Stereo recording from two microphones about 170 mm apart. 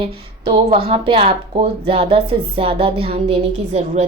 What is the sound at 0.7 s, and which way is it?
A woman's voice, 35° right (ahead or behind).